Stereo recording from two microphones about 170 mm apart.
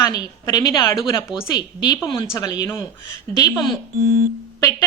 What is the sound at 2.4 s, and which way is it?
A woman's voice, 20° left (ahead or behind).